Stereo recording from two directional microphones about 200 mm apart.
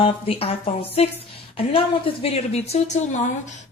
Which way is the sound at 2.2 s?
30° left (ahead or behind).